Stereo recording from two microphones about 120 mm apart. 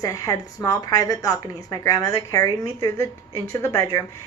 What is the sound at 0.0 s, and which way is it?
A woman's voice, 30° left (ahead or behind).